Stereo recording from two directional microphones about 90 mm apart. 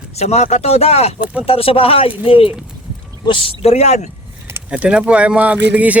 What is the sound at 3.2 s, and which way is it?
Speech, 70° left (ahead or behind).